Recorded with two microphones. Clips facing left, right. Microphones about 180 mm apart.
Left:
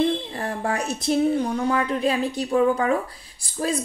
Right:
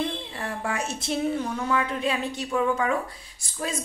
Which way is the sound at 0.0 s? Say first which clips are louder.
Left 7 dB; 40° left (ahead or behind).